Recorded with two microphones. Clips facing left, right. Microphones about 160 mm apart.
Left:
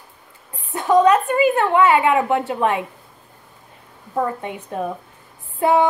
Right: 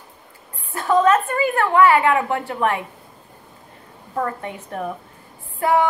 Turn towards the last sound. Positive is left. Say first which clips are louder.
# left 2 dB
turn(degrees=20)  # may be behind; listen again after turning